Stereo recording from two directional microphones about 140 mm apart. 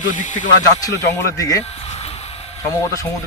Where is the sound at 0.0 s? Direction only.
65° left (ahead or behind).